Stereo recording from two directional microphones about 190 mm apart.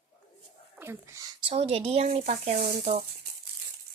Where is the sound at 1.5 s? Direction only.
30° right (ahead or behind).